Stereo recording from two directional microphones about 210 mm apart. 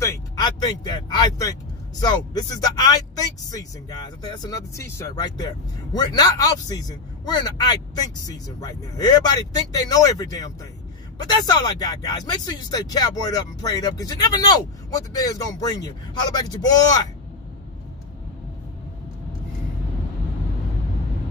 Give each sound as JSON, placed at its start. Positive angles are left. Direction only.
{"t": 0.0, "sound": "speech", "side_deg": 15}
{"t": 4.2, "sound": "speech", "side_deg": 20}